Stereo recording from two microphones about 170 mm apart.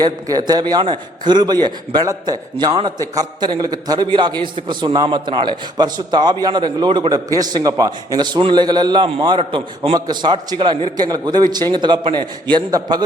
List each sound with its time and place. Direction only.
0.0 s a man's voice: 25° right (ahead or behind)